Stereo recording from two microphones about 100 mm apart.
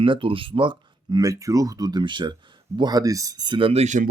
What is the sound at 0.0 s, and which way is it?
Speech, 60° right (ahead or behind).